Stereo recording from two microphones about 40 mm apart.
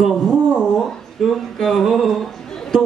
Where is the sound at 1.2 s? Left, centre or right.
Centre.